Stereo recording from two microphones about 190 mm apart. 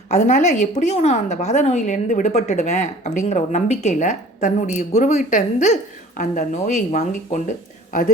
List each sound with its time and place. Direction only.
0.1 s a woman's voice: 40° left (ahead or behind)